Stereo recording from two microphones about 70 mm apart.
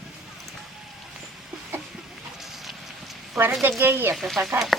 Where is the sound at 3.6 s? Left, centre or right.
Right.